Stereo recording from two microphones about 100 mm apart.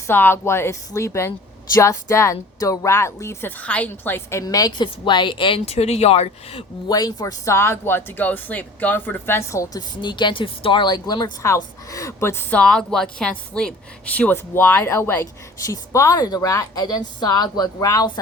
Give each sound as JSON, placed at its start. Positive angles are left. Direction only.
{"t": 0.1, "sound": "a woman's voice", "side_deg": 20}
{"t": 3.6, "sound": "a woman's voice", "side_deg": 15}
{"t": 4.4, "sound": "speech", "side_deg": 40}
{"t": 5.5, "sound": "speech", "side_deg": 90}
{"t": 6.8, "sound": "a woman's voice", "side_deg": 40}
{"t": 10.0, "sound": "speech", "side_deg": 50}
{"t": 11.4, "sound": "a woman's voice", "side_deg": 30}